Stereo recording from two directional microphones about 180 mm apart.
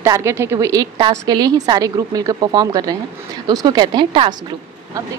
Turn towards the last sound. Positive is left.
turn(degrees=-25)  # may be behind; listen again after turning